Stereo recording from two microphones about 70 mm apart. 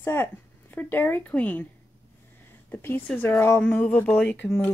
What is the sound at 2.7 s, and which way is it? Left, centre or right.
Speech, left.